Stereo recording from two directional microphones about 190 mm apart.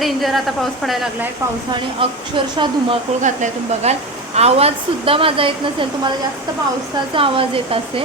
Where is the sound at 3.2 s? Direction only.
35° right (ahead or behind).